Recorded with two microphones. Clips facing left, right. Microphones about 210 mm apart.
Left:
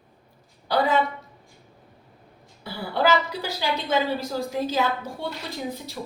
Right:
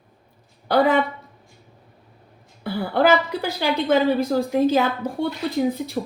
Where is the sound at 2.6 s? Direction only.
55° right (ahead or behind).